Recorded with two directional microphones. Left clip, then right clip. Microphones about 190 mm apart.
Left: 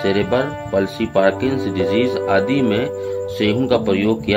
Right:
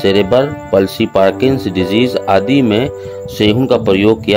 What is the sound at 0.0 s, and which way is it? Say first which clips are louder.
Speech: right 7 dB; 50° right (ahead or behind).